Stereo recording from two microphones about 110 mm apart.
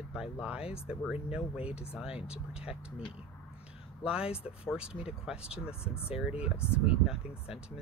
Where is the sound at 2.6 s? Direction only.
60° left (ahead or behind).